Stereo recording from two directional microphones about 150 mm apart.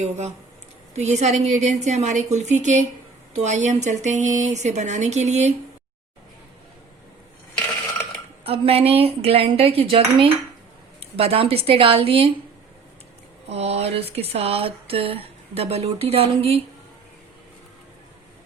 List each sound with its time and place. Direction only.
0.9 s speech: 50° right (ahead or behind)
8.4 s speech: 40° right (ahead or behind)
13.5 s speech: 45° right (ahead or behind)